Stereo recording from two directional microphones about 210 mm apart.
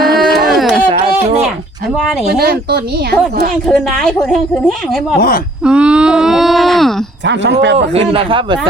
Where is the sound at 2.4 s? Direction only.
50° right (ahead or behind).